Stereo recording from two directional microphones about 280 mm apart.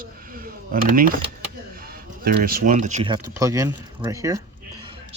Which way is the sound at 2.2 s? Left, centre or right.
Right.